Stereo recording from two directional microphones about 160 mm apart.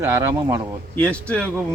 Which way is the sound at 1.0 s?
5° left (ahead or behind).